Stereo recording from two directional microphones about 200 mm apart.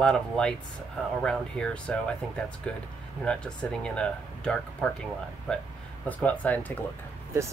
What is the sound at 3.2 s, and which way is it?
Speech, 5° left (ahead or behind).